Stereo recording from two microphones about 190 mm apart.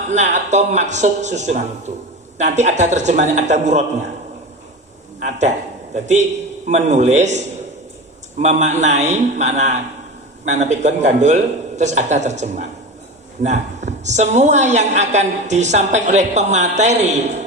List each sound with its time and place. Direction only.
0.1 s a woman's voice: 40° right (ahead or behind)
5.9 s a woman's voice: 35° right (ahead or behind)